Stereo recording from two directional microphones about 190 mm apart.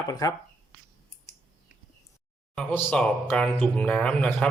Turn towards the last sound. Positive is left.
turn(degrees=5)  # may be behind; listen again after turning